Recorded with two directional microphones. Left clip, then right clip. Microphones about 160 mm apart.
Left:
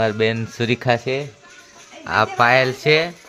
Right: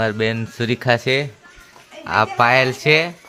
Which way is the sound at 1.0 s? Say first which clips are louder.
Right 4 dB; 30° right (ahead or behind).